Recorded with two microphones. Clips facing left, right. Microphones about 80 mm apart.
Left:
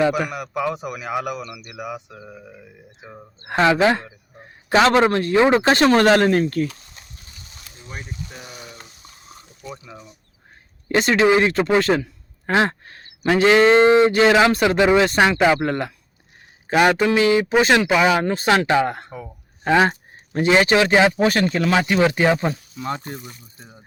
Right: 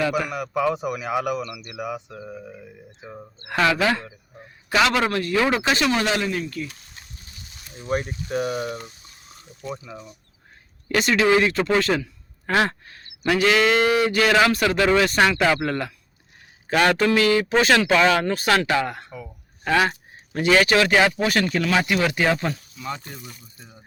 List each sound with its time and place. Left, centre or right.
0.1 s a man's voice: centre
3.4 s speech: left
5.7 s speech: left
8.3 s speech: right
9.6 s a man's voice: centre
10.8 s a man's voice: left
12.8 s a sound: left
13.2 s speech: left
22.8 s speech: left